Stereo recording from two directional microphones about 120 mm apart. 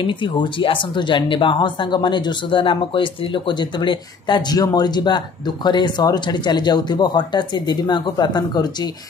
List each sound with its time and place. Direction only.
0.0 s speech: 40° left (ahead or behind)